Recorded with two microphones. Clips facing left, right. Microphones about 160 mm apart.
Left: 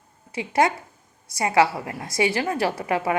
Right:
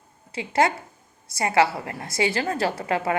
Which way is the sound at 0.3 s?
15° left (ahead or behind).